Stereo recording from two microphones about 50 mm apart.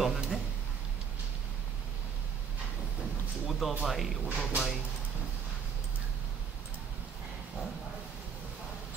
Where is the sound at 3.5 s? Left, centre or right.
Centre.